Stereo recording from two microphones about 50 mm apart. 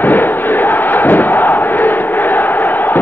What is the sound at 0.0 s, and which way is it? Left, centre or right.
Crowd, left.